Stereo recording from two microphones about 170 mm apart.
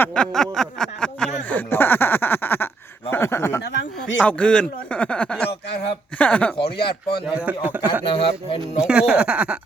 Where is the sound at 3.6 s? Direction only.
90° left.